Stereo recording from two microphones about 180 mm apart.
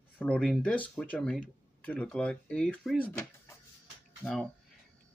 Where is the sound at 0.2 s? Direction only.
5° left (ahead or behind).